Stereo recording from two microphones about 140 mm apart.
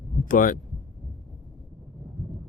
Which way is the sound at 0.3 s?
75° left (ahead or behind).